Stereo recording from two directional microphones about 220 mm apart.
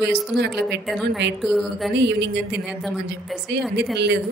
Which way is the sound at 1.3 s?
Centre (ahead or behind).